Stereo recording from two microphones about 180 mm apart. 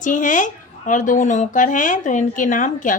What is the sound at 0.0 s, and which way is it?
A woman's voice, 45° left (ahead or behind).